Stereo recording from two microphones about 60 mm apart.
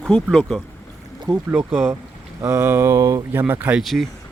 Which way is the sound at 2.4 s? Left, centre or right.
Right.